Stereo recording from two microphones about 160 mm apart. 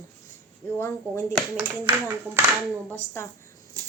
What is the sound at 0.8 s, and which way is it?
Speech, 15° left (ahead or behind).